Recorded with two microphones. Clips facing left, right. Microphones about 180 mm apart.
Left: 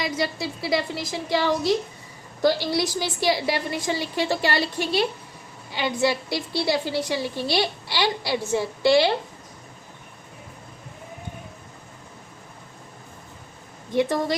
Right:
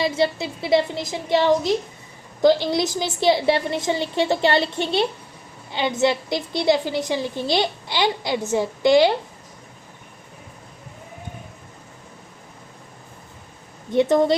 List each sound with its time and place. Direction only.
0.0 s a woman's voice: 25° right (ahead or behind)
13.9 s a woman's voice: 25° right (ahead or behind)